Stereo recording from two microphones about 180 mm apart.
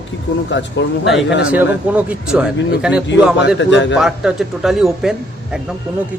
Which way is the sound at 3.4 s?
80° left.